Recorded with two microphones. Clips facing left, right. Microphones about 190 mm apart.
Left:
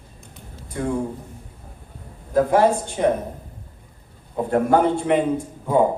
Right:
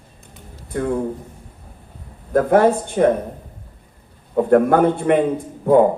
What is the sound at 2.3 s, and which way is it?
Speech, 55° right (ahead or behind).